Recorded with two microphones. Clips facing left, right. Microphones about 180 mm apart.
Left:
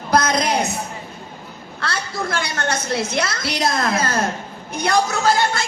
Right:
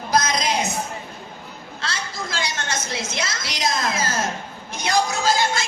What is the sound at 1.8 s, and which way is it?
A woman's voice, 60° left (ahead or behind).